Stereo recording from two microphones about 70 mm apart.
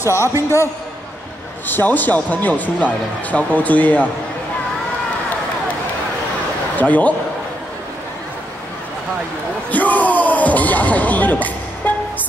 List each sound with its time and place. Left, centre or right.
0.0 s a man's voice: left
1.7 s speech: left
6.8 s speech: left
9.7 s speech: left